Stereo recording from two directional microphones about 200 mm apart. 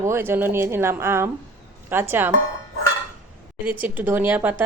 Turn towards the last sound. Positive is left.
turn(degrees=-10)  # may be behind; listen again after turning